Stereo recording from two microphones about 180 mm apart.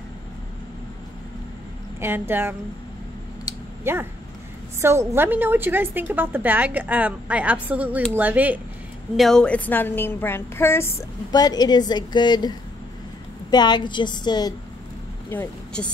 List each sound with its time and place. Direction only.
2.0 s a woman's voice: 10° right (ahead or behind)
3.8 s a woman's voice: 15° right (ahead or behind)
9.1 s a woman's voice: centre (ahead or behind); by 14.5 s 25° left (ahead or behind)
15.2 s speech: 10° left (ahead or behind)